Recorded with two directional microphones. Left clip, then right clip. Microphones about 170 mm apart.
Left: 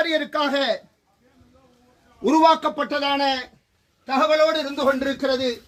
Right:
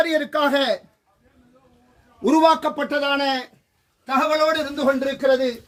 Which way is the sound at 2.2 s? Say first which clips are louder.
Even; 30° right (ahead or behind).